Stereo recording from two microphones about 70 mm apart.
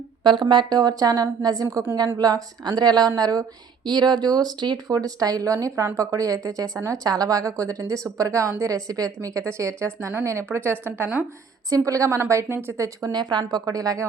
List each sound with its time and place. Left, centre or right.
0.2 s speech: right
3.2 s speech: right
3.8 s a woman's voice: right
6.7 s speech: right
7.0 s a woman's voice: right
9.4 s a woman's voice: right
11.9 s speech: right
13.1 s speech: right
13.5 s speech: right